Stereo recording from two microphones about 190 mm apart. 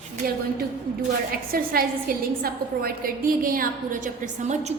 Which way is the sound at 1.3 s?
50° right (ahead or behind).